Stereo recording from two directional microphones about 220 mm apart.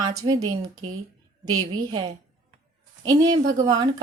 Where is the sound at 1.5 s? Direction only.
20° right (ahead or behind).